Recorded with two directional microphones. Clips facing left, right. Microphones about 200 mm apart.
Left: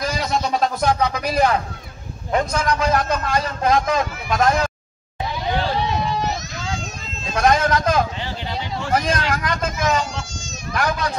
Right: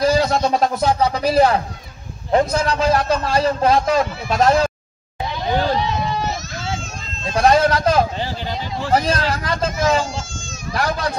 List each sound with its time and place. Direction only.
0.0 s a sound: 30° right (ahead or behind)
0.4 s a man's voice: 25° right (ahead or behind)
7.3 s a man's voice: 30° right (ahead or behind)